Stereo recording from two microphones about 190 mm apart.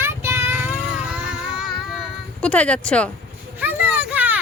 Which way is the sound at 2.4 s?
5° left (ahead or behind).